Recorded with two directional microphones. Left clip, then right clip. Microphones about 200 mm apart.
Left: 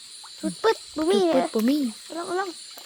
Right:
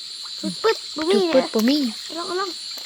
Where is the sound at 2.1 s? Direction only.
50° left (ahead or behind).